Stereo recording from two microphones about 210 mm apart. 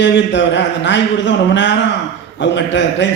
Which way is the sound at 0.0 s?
60° left (ahead or behind).